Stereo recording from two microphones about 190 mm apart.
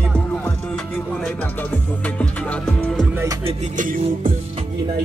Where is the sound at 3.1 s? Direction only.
15° right (ahead or behind).